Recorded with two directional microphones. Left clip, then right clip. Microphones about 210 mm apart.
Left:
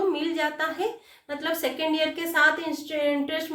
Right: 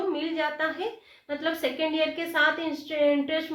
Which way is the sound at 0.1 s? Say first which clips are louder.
Left 2 dB; 30° left (ahead or behind).